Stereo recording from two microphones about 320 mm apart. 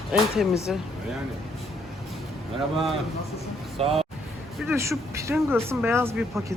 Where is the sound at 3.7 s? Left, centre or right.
Centre.